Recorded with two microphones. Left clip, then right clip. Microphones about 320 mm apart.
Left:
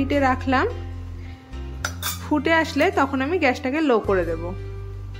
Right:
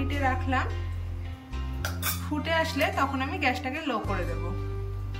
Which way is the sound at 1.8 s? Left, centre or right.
Centre.